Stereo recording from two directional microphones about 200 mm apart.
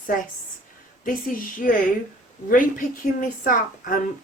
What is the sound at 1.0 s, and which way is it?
A woman's voice, 45° left (ahead or behind).